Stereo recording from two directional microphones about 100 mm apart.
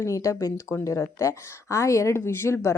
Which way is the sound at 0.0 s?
30° left (ahead or behind).